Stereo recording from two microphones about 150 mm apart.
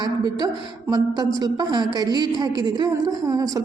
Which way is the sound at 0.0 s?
25° right (ahead or behind).